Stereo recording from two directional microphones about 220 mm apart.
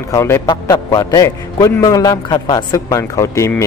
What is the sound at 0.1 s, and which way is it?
A man's voice, 15° left (ahead or behind).